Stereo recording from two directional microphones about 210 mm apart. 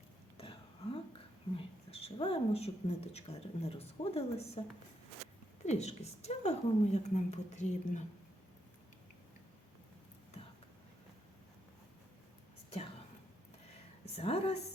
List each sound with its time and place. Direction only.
0.3 s a sound: 25° left (ahead or behind)
1.5 s a woman's voice: 25° left (ahead or behind)
5.6 s a woman's voice: 30° left (ahead or behind)
14.2 s a woman's voice: 30° left (ahead or behind)